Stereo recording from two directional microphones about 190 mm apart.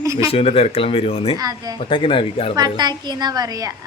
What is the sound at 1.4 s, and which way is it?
Speech, 20° right (ahead or behind).